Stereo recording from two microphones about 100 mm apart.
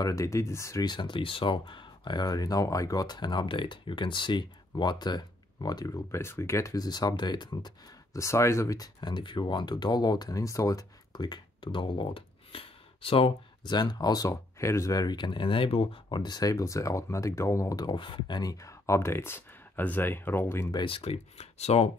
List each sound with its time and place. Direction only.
0.0 s speech: 30° left (ahead or behind)
0.8 s speech: 50° left (ahead or behind)
5.9 s speech: 30° left (ahead or behind); by 8.2 s 45° left (ahead or behind)
8.2 s speech: 30° left (ahead or behind)
9.1 s speech: 50° left (ahead or behind)
13.7 s speech: 45° left (ahead or behind); by 16.0 s 70° left (ahead or behind)
16.1 s speech: 45° left (ahead or behind)
17.8 s speech: 55° left (ahead or behind); by 20.6 s 25° left (ahead or behind)
20.7 s speech: 60° left (ahead or behind); by 21.9 s 90° left